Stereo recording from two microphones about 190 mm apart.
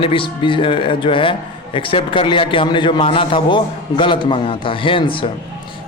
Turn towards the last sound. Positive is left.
turn(degrees=25)  # may be behind; listen again after turning